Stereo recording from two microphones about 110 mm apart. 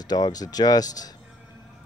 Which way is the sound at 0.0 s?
35° left (ahead or behind).